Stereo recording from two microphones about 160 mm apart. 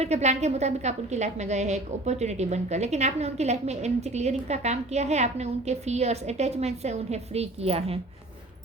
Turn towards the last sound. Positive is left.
turn(degrees=-40)  # may be behind; listen again after turning